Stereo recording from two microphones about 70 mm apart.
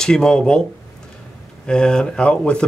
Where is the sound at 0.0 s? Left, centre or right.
Centre.